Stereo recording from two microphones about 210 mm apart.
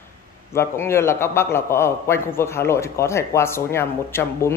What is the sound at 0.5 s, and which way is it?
A man's voice, 10° left (ahead or behind).